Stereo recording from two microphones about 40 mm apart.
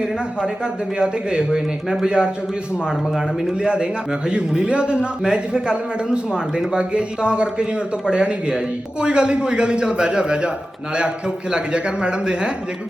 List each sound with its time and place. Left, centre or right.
0.0 s a man's voice: centre
3.6 s a man's voice: right
11.5 s a man's voice: right